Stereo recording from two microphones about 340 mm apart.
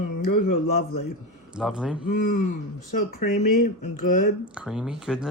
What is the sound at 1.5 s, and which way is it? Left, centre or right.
Speech, centre.